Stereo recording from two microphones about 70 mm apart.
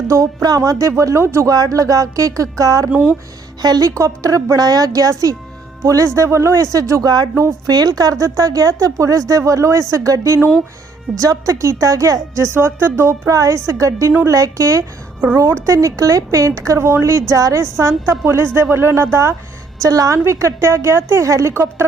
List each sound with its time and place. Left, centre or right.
0.4 s a woman's voice: right
1.5 s a woman's voice: right
2.9 s speech: centre
3.6 s a woman's voice: right
7.0 s a woman's voice: right
16.7 s a woman's voice: right
19.8 s a woman's voice: right
21.5 s speech: right